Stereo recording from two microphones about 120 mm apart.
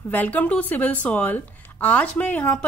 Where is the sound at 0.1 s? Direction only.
15° left (ahead or behind).